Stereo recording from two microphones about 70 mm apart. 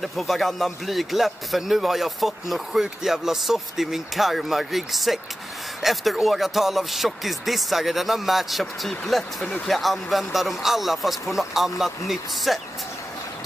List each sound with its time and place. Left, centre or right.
0.0 s speech: centre